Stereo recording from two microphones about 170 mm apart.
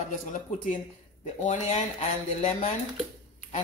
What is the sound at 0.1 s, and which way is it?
Dishes, 50° left (ahead or behind).